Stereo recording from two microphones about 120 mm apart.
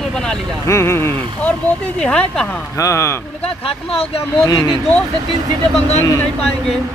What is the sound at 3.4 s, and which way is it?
Speech, 55° left (ahead or behind).